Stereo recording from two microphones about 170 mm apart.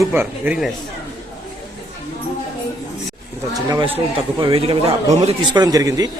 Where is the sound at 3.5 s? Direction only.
20° right (ahead or behind).